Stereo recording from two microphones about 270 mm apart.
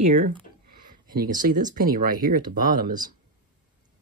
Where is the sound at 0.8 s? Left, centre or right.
Right.